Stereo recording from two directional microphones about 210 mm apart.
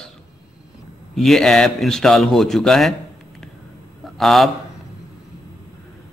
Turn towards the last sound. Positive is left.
turn(degrees=0)  # may be behind; listen again after turning